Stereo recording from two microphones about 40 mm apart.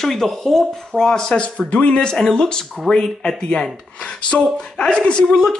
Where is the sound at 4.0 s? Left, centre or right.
Left.